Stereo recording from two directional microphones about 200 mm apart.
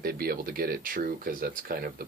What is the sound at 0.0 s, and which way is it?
Speech, 50° right (ahead or behind).